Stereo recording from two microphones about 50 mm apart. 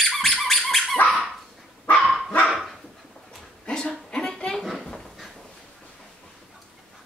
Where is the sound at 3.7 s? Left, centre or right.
Centre.